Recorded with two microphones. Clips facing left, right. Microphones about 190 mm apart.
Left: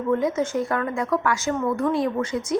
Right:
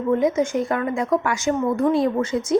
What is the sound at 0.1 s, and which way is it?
A woman's voice, 20° right (ahead or behind).